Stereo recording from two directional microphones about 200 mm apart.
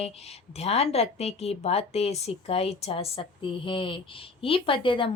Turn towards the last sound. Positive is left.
turn(degrees=25)  # may be behind; listen again after turning